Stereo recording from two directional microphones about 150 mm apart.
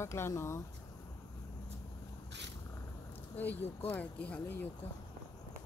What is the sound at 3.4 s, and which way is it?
Speech, 10° left (ahead or behind).